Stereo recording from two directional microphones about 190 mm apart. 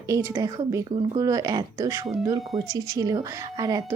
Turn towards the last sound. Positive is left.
turn(degrees=-20)  # may be behind; listen again after turning